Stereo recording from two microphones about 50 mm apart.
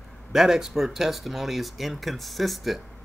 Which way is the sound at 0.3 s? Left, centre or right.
Centre.